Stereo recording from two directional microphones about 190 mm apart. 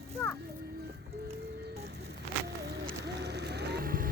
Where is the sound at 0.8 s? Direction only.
55° right (ahead or behind).